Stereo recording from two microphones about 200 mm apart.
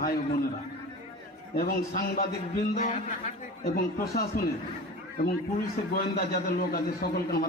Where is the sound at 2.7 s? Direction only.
35° left (ahead or behind).